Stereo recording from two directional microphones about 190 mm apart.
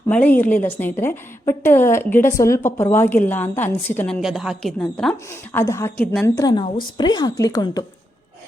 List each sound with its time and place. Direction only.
0.1 s a woman's voice: 10° left (ahead or behind)
5.3 s a woman's voice: 15° left (ahead or behind)